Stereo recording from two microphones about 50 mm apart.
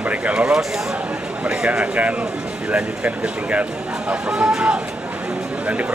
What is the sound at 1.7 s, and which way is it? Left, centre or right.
Speech, right.